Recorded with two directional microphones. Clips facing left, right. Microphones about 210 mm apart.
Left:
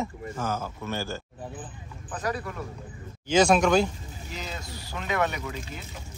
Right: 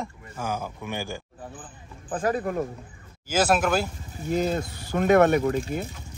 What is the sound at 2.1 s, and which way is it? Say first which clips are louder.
Speech: right 6 dB; 50° right (ahead or behind).